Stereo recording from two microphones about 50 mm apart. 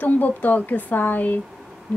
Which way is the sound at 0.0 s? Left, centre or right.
Left.